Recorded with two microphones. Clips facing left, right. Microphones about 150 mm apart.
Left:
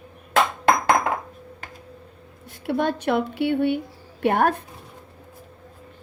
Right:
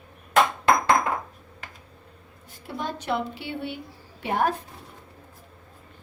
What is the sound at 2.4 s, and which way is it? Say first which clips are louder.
Speech: left 9 dB; 70° left (ahead or behind).